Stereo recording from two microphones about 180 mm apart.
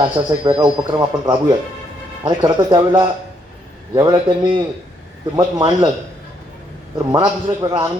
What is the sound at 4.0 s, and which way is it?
A man's voice, 20° right (ahead or behind).